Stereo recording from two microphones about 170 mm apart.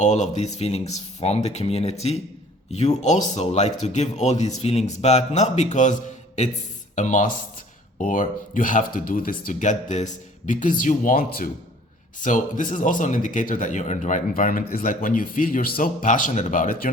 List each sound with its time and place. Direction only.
0.0 s a man's voice: 45° left (ahead or behind); by 11.4 s 60° left (ahead or behind)
12.2 s a man's voice: 50° left (ahead or behind)